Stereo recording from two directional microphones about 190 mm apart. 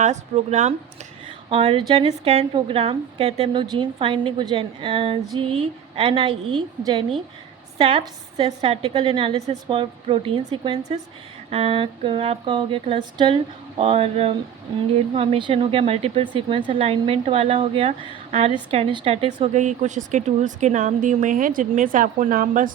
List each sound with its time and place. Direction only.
0.0 s a woman's voice: 40° right (ahead or behind)
7.8 s a woman's voice: 30° right (ahead or behind); by 22.7 s 45° right (ahead or behind)